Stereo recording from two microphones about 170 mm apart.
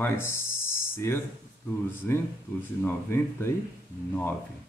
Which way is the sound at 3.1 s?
15° left (ahead or behind).